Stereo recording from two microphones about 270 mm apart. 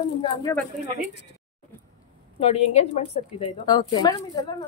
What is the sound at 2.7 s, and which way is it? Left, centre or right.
A woman's voice, left.